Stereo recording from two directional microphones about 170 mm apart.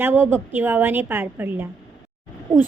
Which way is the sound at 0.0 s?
10° right (ahead or behind).